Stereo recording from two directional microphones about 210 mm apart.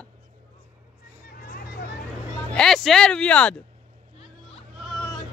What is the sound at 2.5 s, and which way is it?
Speech, 5° left (ahead or behind).